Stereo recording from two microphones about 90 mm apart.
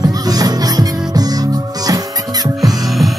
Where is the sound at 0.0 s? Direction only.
45° right (ahead or behind).